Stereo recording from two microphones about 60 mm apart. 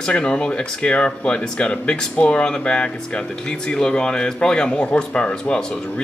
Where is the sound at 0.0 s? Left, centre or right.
Centre.